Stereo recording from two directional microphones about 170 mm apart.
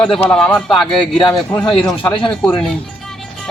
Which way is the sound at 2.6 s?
5° left (ahead or behind).